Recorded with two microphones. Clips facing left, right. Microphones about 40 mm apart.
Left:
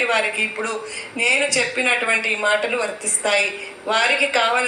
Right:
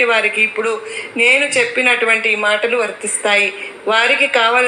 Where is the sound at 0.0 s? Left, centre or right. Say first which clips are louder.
Right 6 dB; right.